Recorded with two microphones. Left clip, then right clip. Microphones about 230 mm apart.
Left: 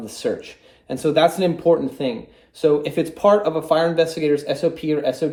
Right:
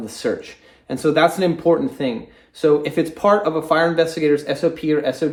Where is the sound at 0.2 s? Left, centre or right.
Right.